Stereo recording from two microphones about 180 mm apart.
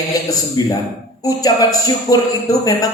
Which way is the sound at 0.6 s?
20° left (ahead or behind).